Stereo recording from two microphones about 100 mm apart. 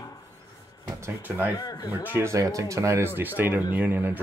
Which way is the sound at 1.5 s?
35° left (ahead or behind).